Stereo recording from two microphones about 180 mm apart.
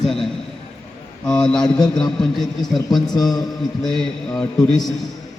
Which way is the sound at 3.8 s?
Centre (ahead or behind).